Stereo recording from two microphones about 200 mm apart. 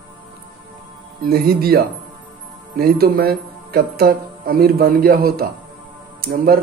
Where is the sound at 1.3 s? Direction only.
50° right (ahead or behind).